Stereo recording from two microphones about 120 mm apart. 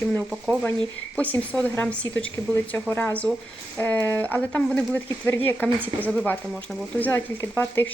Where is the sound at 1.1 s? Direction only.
15° left (ahead or behind).